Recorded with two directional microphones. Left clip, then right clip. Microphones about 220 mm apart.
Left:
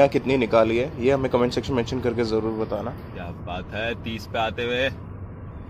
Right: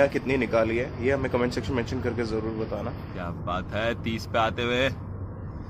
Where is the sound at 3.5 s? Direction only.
15° right (ahead or behind).